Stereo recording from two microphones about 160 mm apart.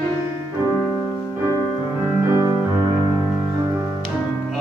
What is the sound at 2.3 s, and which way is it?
Music, 25° right (ahead or behind).